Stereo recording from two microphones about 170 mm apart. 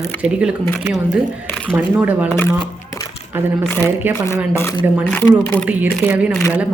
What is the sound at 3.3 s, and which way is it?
Speech, 10° right (ahead or behind).